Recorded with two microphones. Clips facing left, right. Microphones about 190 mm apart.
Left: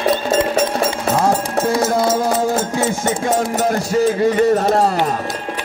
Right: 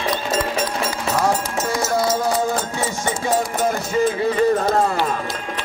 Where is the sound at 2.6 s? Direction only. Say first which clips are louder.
Left 5 dB; 50° left (ahead or behind).